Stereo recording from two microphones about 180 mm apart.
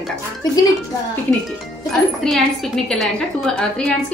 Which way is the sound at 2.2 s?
Centre (ahead or behind).